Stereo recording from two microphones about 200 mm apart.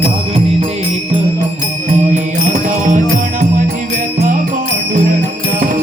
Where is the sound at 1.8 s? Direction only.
35° right (ahead or behind).